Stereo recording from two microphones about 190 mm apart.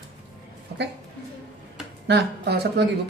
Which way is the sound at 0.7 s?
60° right (ahead or behind).